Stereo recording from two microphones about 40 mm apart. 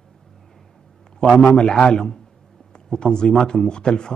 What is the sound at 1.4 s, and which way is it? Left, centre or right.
A man's voice, centre.